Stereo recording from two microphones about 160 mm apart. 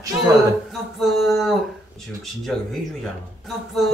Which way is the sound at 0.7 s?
Centre (ahead or behind).